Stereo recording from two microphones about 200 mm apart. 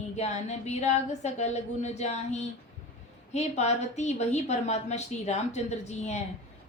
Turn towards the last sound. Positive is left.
turn(degrees=35)  # may be behind; listen again after turning